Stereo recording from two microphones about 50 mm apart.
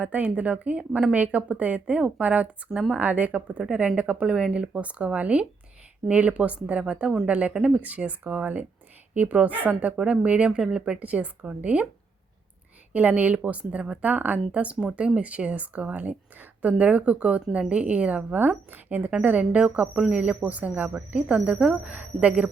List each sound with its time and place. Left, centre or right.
0.0 s a woman's voice: right
10.0 s a woman's voice: centre
11.0 s a woman's voice: right
12.9 s a woman's voice: right
19.2 s a woman's voice: right